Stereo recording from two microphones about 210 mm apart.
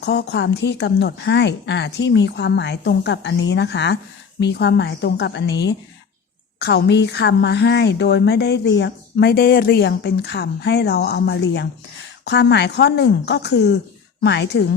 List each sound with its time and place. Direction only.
0.0 s speech: 50° left (ahead or behind)